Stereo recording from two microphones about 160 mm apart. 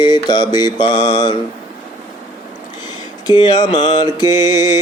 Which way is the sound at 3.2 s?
25° left (ahead or behind).